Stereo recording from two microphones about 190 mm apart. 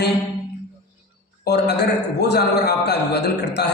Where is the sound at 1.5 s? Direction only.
60° left (ahead or behind).